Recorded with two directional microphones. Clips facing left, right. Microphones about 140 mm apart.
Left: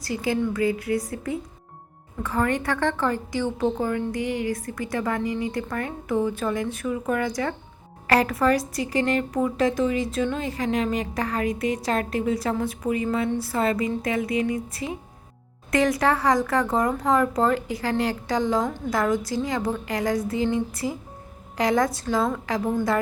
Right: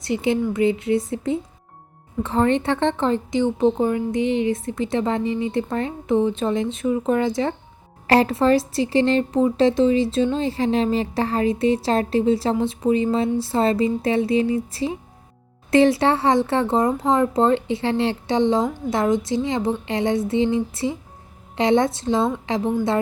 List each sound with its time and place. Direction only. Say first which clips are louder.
0.0 s a woman's voice: right 4 dB; 25° right (ahead or behind)